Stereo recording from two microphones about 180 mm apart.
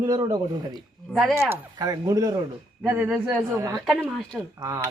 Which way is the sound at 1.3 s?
15° right (ahead or behind).